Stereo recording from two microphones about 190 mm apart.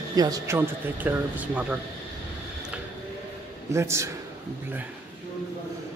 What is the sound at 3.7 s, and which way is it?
Speech, 15° right (ahead or behind).